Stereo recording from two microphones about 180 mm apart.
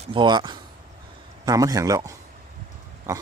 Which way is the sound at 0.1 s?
25° right (ahead or behind).